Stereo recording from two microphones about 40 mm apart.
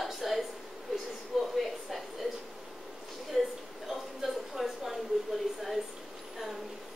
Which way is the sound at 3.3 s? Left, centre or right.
Centre.